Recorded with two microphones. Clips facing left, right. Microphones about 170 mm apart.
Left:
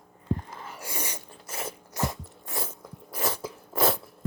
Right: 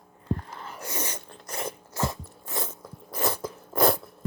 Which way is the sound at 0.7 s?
10° left (ahead or behind).